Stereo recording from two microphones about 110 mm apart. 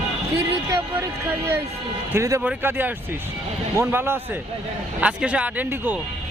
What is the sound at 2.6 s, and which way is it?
Speech, 20° right (ahead or behind).